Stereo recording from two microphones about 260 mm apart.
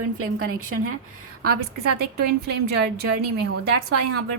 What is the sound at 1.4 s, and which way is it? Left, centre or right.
A woman's voice, right.